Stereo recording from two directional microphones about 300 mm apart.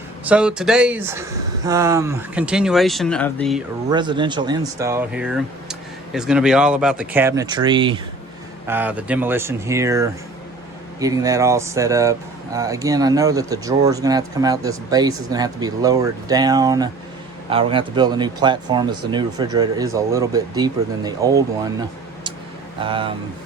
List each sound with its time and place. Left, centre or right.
0.3 s speech: centre
3.8 s speech: centre